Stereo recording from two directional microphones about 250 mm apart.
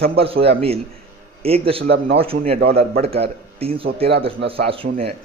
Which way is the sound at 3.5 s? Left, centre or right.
Right.